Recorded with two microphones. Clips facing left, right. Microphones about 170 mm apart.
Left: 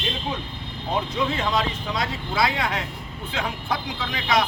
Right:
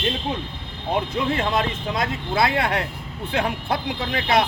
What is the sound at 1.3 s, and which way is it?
Speech, 55° right (ahead or behind).